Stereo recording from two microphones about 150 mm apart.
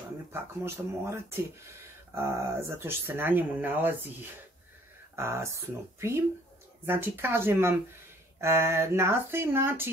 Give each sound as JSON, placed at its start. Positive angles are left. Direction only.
{"t": 0.3, "sound": "speech", "side_deg": -15}